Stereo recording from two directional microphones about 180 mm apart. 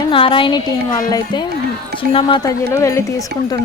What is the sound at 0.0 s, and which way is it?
Speech, 30° left (ahead or behind).